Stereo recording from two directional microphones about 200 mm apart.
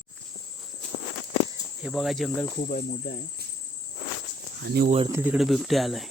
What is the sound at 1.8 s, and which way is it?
Speech, centre (ahead or behind).